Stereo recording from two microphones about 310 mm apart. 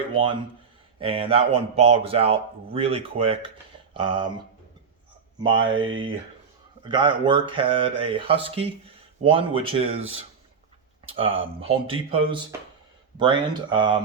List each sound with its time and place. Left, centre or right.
0.1 s a man's voice: centre
5.4 s a man's voice: centre
11.1 s a man's voice: centre